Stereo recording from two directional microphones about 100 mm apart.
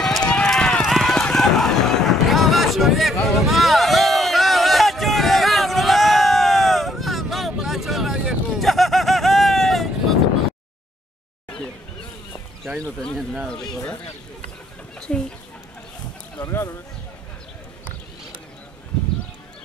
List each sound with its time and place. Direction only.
0.0 s run: 5° left (ahead or behind)
13.0 s speech: centre (ahead or behind)
15.0 s chicken: 5° left (ahead or behind)
16.3 s a sound: 25° left (ahead or behind)